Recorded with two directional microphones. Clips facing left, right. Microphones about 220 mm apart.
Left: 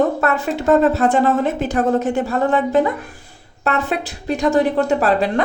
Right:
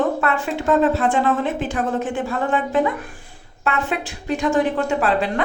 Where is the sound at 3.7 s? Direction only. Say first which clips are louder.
Left 3 dB; 35° left (ahead or behind).